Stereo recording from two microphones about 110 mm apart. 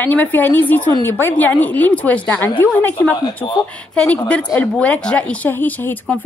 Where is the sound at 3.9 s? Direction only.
10° left (ahead or behind).